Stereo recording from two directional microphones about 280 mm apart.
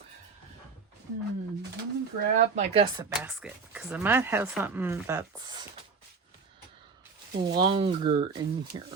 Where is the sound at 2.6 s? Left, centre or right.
Right.